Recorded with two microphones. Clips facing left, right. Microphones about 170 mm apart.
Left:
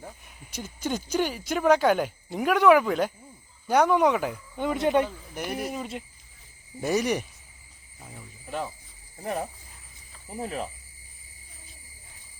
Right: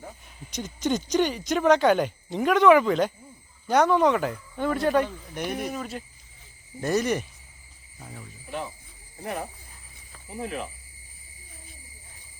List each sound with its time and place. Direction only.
0.5 s speech: 5° left (ahead or behind)
5.0 s speech: 5° left (ahead or behind)
5.7 s speech: 20° left (ahead or behind); by 8.3 s 5° left (ahead or behind)
10.4 s speech: 35° left (ahead or behind)